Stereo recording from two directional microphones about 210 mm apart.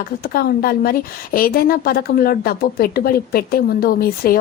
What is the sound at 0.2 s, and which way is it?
A woman's voice, 45° left (ahead or behind).